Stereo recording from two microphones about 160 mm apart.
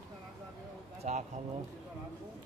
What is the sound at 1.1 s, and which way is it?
Speech, 50° right (ahead or behind).